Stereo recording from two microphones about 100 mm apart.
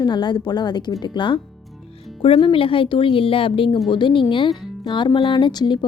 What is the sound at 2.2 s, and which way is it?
A woman's voice, 65° left (ahead or behind).